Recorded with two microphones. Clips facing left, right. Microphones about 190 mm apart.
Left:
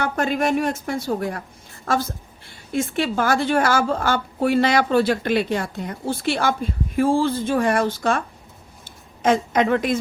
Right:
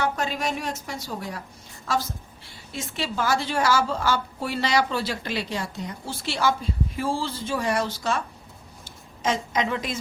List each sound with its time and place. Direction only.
0.0 s a woman's voice: 55° left (ahead or behind)
9.2 s a woman's voice: 55° left (ahead or behind)